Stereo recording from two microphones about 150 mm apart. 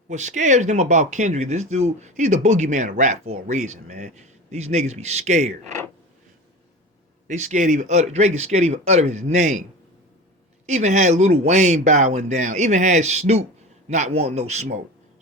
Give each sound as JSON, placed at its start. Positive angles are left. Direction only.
{"t": 0.1, "sound": "speech", "side_deg": -50}
{"t": 7.3, "sound": "speech", "side_deg": -55}
{"t": 10.7, "sound": "speech", "side_deg": -50}